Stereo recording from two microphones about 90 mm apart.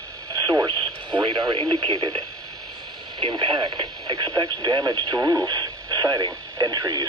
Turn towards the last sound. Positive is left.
turn(degrees=-45)  # may be behind; listen again after turning